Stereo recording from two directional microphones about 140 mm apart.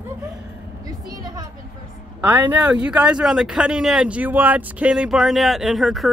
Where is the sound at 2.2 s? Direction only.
15° right (ahead or behind).